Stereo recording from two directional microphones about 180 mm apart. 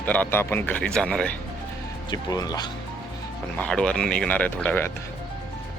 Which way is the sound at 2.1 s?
20° left (ahead or behind).